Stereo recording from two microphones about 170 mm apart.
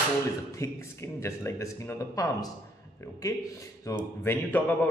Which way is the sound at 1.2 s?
15° left (ahead or behind).